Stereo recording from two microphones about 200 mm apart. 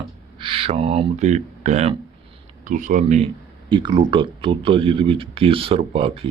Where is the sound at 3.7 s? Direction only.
25° right (ahead or behind).